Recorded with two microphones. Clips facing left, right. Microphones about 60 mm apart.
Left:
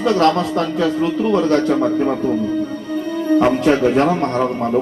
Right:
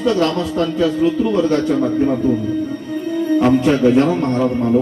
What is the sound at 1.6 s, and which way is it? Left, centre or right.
Speech, left.